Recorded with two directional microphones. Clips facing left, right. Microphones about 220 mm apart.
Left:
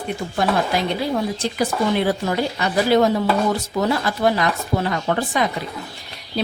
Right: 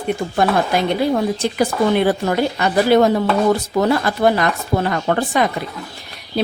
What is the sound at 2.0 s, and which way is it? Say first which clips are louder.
Speech: right 4 dB; 55° right (ahead or behind).